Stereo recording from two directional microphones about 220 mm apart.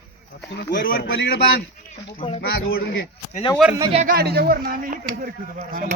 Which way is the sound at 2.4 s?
45° left (ahead or behind).